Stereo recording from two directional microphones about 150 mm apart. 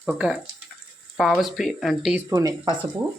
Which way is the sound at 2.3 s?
25° right (ahead or behind).